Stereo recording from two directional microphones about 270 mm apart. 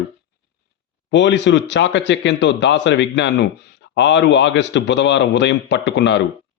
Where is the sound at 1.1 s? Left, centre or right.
Left.